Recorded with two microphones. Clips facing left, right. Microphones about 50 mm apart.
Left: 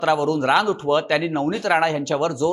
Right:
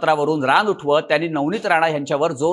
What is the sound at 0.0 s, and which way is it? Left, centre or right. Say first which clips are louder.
Speech: right 2 dB; centre.